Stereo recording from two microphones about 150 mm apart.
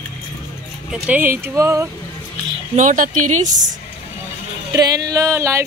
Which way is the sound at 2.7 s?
60° right (ahead or behind).